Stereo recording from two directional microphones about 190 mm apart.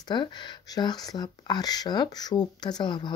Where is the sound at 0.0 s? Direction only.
20° left (ahead or behind).